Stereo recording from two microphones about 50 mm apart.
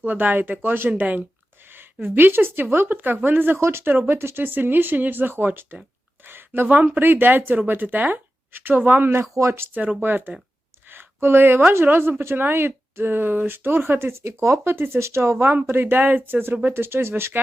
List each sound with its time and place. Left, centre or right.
0.0 s speech: right
1.7 s speech: right
3.6 s speech: right
3.8 s speech: right
9.3 s speech: right
10.0 s speech: right
15.7 s speech: right